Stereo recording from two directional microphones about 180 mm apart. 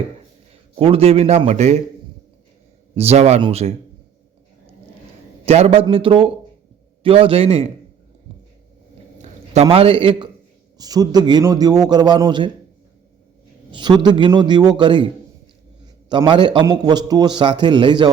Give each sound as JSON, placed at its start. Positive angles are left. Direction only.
{"t": 0.8, "sound": "a man's voice", "side_deg": -30}
{"t": 2.9, "sound": "a man's voice", "side_deg": -35}
{"t": 5.5, "sound": "a man's voice", "side_deg": -35}
{"t": 9.5, "sound": "a man's voice", "side_deg": -35}
{"t": 13.7, "sound": "a man's voice", "side_deg": -25}